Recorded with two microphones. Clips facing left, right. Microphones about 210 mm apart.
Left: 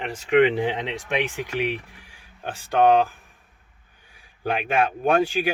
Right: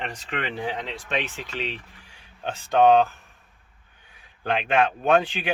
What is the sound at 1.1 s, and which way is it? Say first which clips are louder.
Speech: left 4 dB; 10° left (ahead or behind).